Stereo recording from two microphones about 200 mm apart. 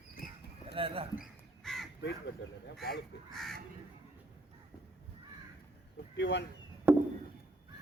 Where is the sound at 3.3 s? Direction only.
Centre (ahead or behind).